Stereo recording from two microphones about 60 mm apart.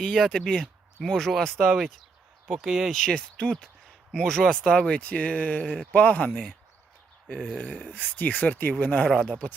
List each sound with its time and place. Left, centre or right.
0.0 s speech: centre
2.5 s speech: centre
3.0 s speech: centre
7.3 s speech: centre
7.9 s speech: left